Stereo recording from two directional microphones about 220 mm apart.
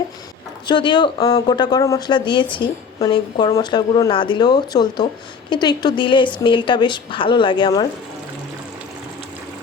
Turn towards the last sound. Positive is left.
turn(degrees=20)  # may be behind; listen again after turning